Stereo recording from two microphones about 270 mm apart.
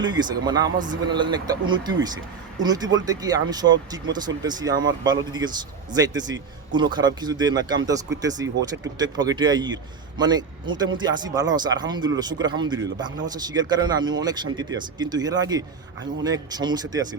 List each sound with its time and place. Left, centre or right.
0.0 s speech: centre